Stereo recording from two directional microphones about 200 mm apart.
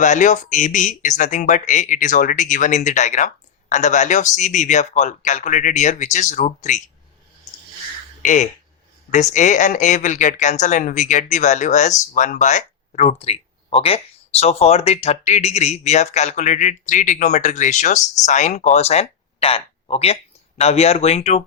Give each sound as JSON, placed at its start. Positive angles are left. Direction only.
{"t": 0.0, "sound": "speech", "side_deg": 35}
{"t": 8.2, "sound": "speech", "side_deg": 40}